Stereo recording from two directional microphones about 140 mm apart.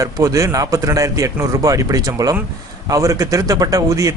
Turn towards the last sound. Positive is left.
turn(degrees=-25)  # may be behind; listen again after turning